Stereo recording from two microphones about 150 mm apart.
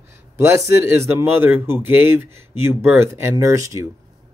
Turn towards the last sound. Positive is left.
turn(degrees=-20)  # may be behind; listen again after turning